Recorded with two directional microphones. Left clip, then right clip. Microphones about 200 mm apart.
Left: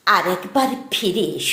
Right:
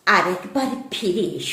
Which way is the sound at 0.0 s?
5° left (ahead or behind).